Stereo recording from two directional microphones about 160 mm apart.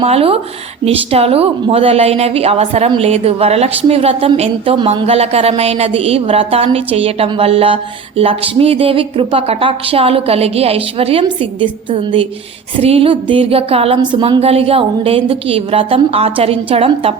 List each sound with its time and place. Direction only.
0.0 s a woman's voice: 40° right (ahead or behind)